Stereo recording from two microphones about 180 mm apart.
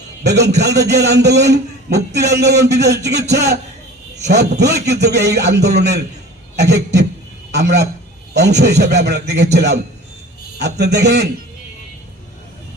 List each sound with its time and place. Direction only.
0.2 s a man's voice: 70° right (ahead or behind)